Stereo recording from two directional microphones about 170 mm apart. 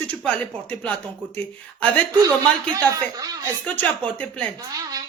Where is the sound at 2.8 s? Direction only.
20° right (ahead or behind).